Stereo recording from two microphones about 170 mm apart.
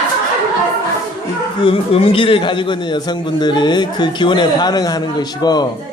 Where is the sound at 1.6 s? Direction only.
35° left (ahead or behind).